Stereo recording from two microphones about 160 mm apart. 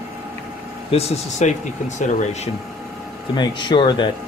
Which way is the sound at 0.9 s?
40° left (ahead or behind).